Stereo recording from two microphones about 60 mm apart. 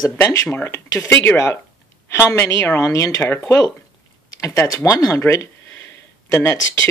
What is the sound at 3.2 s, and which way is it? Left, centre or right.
Speech, left.